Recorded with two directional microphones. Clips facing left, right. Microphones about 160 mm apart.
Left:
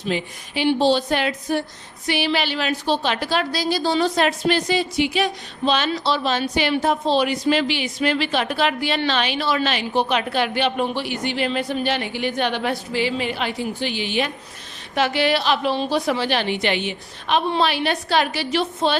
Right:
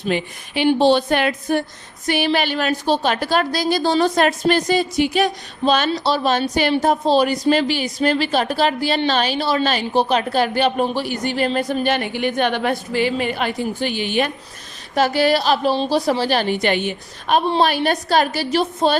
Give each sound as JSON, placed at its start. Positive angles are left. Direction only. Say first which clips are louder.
{"t": 0.1, "sound": "a woman's voice", "louder": "right 3 dB", "side_deg": -60}